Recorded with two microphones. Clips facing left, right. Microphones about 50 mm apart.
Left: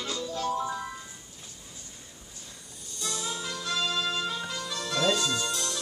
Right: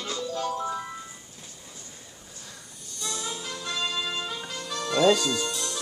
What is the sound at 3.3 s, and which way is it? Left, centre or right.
Music, centre.